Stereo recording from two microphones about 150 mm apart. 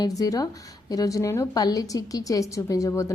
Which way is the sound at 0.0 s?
25° left (ahead or behind).